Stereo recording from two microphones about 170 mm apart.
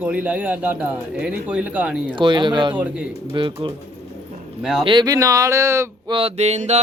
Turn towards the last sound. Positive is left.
turn(degrees=-40)  # may be behind; listen again after turning